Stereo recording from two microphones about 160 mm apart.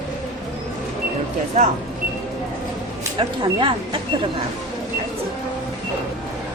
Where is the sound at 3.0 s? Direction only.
30° right (ahead or behind).